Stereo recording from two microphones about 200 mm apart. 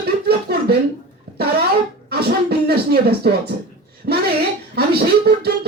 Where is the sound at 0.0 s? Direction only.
50° right (ahead or behind).